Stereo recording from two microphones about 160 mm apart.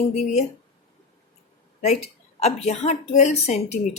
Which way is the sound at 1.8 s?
40° left (ahead or behind).